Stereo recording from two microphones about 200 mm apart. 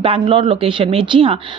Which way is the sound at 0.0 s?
25° right (ahead or behind).